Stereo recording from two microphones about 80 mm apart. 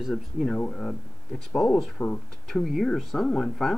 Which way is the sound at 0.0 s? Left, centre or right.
Centre.